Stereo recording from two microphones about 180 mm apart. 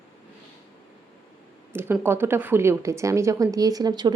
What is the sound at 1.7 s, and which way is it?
A woman's voice, 10° right (ahead or behind).